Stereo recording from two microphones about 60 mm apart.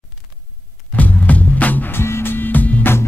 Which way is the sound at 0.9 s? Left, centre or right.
Left.